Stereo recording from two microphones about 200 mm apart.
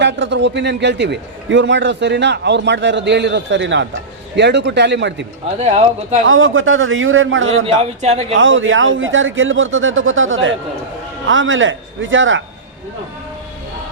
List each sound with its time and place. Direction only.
0.0 s a man's voice: 60° right (ahead or behind)
5.5 s speech: 35° right (ahead or behind)
6.2 s a man's voice: 80° right
8.0 s speech: 35° right (ahead or behind)
8.4 s speech: 70° right (ahead or behind)